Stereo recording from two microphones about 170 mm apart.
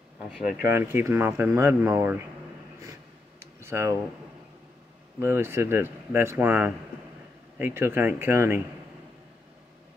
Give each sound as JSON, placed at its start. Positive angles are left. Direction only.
{"t": 0.3, "sound": "speech", "side_deg": -5}
{"t": 0.7, "sound": "speech", "side_deg": -15}
{"t": 2.8, "sound": "a sound", "side_deg": -15}
{"t": 5.2, "sound": "speech", "side_deg": -15}